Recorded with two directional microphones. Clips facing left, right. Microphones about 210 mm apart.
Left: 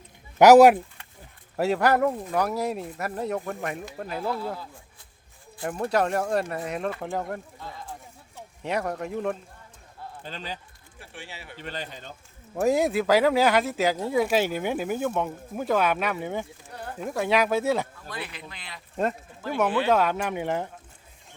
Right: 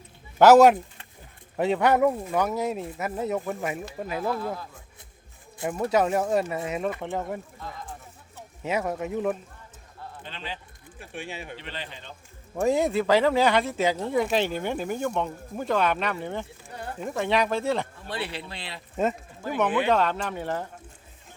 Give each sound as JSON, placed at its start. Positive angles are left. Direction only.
{"t": 0.3, "sound": "speech", "side_deg": 10}
{"t": 2.0, "sound": "speech", "side_deg": -10}
{"t": 5.6, "sound": "speech", "side_deg": -5}
{"t": 8.6, "sound": "speech", "side_deg": -5}
{"t": 10.2, "sound": "speech", "side_deg": 40}
{"t": 11.1, "sound": "speech", "side_deg": -20}
{"t": 11.5, "sound": "speech", "side_deg": 45}
{"t": 12.5, "sound": "speech", "side_deg": 5}
{"t": 16.6, "sound": "speech", "side_deg": -10}
{"t": 17.0, "sound": "speech", "side_deg": 5}
{"t": 18.1, "sound": "speech", "side_deg": -30}
{"t": 19.9, "sound": "speech", "side_deg": 10}